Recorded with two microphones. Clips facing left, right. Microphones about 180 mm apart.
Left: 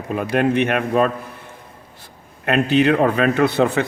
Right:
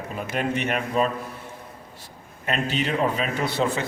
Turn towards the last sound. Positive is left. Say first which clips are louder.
# left 8 dB
turn(degrees=60)  # may be behind; listen again after turning